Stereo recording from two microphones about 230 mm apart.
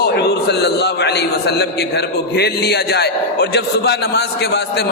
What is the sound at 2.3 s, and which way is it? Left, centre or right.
A man's voice, left.